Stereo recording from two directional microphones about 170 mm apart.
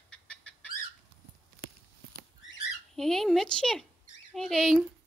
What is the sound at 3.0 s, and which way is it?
Speech, centre (ahead or behind).